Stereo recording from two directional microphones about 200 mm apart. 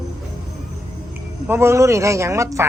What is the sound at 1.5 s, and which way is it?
Speech, 15° right (ahead or behind).